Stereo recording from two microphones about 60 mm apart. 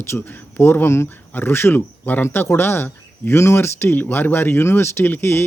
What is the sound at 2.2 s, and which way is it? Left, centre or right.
Speech, left.